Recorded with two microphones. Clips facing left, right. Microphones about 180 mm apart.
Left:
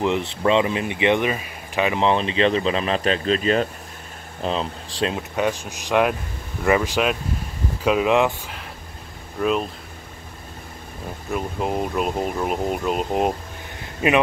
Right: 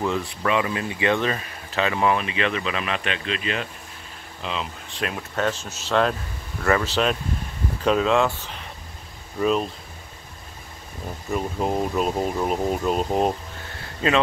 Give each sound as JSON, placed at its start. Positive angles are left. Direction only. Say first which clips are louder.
{"t": 0.0, "sound": "speech", "louder": "left 4 dB", "side_deg": 20}
{"t": 2.0, "sound": "speech", "louder": "left 4 dB", "side_deg": 30}
{"t": 4.9, "sound": "speech", "louder": "left 5 dB", "side_deg": 25}
{"t": 5.3, "sound": "speech", "louder": "left 2 dB", "side_deg": 15}
{"t": 9.4, "sound": "speech", "louder": "even", "side_deg": 0}
{"t": 11.2, "sound": "speech", "louder": "even", "side_deg": 0}
{"t": 13.7, "sound": "a sound", "louder": "left 2 dB", "side_deg": 15}